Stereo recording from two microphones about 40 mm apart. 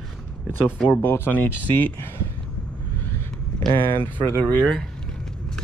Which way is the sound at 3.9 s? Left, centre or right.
Left.